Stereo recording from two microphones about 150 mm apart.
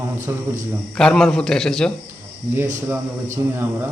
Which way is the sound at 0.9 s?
5° left (ahead or behind).